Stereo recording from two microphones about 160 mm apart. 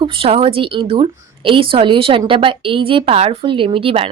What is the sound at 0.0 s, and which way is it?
A woman's voice, 35° right (ahead or behind).